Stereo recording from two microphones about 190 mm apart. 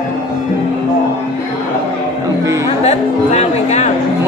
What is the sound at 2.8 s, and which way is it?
Music, 35° left (ahead or behind).